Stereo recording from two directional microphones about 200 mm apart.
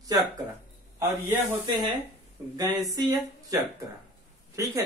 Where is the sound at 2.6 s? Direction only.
20° right (ahead or behind).